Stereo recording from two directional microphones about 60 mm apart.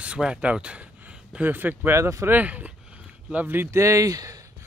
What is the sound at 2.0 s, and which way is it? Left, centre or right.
Speech, right.